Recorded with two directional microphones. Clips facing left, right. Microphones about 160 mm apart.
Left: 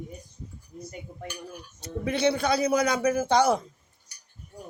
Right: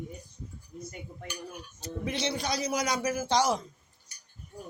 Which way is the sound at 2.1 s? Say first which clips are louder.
Left 9 dB; 55° left (ahead or behind).